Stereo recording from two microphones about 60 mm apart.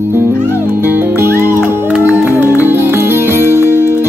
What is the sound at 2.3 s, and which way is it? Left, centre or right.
Music, right.